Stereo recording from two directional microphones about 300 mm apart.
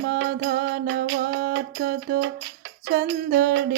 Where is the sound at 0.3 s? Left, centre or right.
Right.